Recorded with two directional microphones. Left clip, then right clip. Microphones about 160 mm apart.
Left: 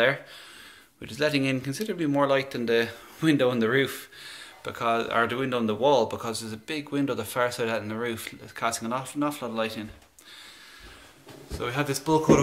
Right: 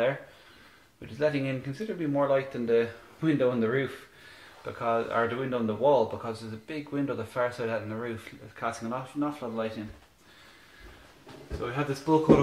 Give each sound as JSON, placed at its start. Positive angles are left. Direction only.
{"t": 1.0, "sound": "speech", "side_deg": 25}
{"t": 11.6, "sound": "speech", "side_deg": 15}